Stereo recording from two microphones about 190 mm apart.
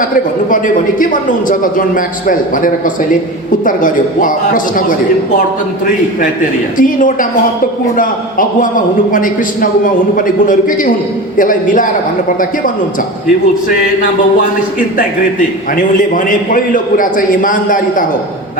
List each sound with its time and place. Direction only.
0.5 s a man's voice: 45° left (ahead or behind)
6.7 s a man's voice: 45° left (ahead or behind)
15.7 s a man's voice: 45° left (ahead or behind)